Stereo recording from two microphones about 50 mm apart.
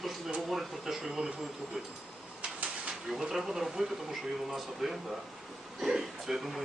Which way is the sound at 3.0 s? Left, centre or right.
Centre.